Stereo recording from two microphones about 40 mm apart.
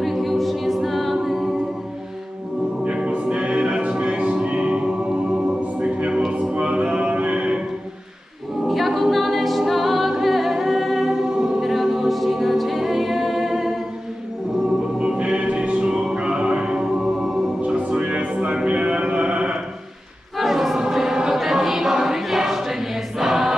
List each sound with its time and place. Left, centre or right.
0.0 s a capella: centre
2.8 s music: right
8.6 s a capella: centre
11.1 s choir: centre
11.6 s a capella: centre
15.0 s music: right
17.6 s music: right
20.3 s choir: centre